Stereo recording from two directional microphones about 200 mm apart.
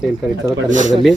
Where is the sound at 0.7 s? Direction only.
40° right (ahead or behind).